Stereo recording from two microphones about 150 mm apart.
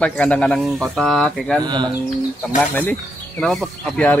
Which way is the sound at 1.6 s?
30° right (ahead or behind).